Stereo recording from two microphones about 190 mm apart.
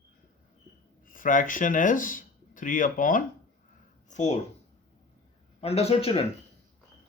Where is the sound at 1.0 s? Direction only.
45° left (ahead or behind).